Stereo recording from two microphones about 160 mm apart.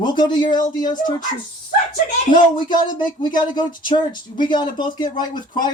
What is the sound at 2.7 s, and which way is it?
Speech, 30° left (ahead or behind).